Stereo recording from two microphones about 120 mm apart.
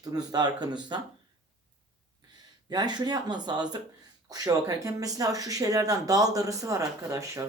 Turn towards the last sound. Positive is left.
turn(degrees=-25)  # may be behind; listen again after turning